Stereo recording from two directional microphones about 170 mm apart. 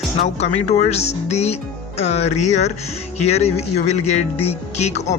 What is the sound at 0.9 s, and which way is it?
Speech, 40° left (ahead or behind).